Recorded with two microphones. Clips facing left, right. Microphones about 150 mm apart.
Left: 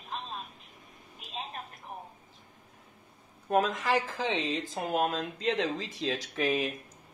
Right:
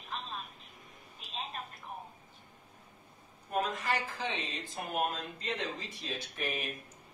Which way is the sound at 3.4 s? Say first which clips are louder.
Left 6 dB; 90° left.